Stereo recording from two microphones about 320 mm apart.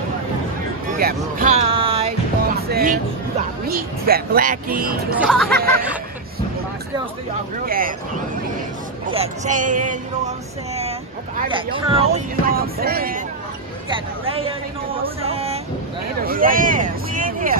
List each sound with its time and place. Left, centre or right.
0.9 s speech: right
2.5 s music: right
3.6 s speech: right
5.2 s speech: centre
7.6 s speech: right
9.0 s speech: centre
13.8 s speech: centre